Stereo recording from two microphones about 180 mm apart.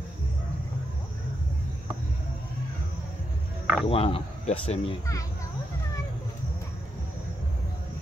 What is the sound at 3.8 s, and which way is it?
Speech, 30° left (ahead or behind).